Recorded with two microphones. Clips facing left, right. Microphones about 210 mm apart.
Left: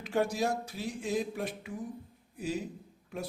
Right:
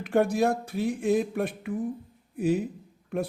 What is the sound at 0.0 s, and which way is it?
A man's voice, 55° right (ahead or behind).